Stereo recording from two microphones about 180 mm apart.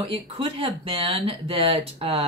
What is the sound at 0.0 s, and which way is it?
A woman's voice, 30° right (ahead or behind).